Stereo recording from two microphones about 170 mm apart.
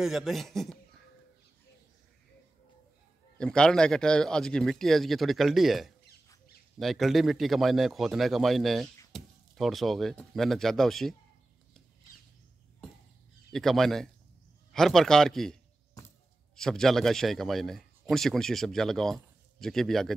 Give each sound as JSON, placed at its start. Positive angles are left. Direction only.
{"t": 0.0, "sound": "a man's voice", "side_deg": 0}
{"t": 3.3, "sound": "a man's voice", "side_deg": 5}
{"t": 13.5, "sound": "a man's voice", "side_deg": 0}
{"t": 16.5, "sound": "a man's voice", "side_deg": 5}